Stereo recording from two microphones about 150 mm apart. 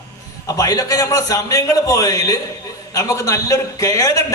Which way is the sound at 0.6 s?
25° left (ahead or behind).